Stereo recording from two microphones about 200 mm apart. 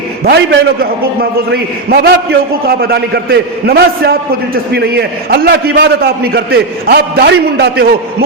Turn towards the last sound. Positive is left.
turn(degrees=-50)  # may be behind; listen again after turning